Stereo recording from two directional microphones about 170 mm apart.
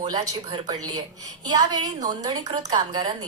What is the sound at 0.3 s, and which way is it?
A woman's voice, 25° right (ahead or behind).